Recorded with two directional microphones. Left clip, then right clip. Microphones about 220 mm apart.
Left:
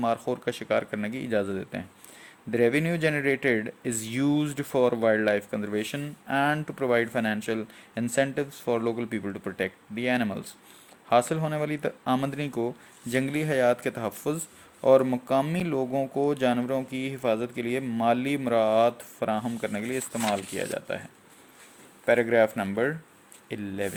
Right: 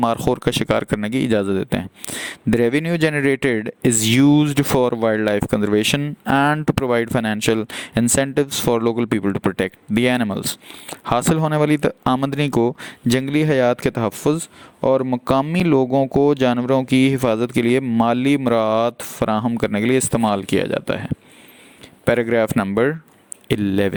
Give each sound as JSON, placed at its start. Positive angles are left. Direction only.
{"t": 0.0, "sound": "speech", "side_deg": -45}